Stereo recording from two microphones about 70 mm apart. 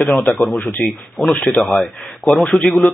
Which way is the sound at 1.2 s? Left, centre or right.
Centre.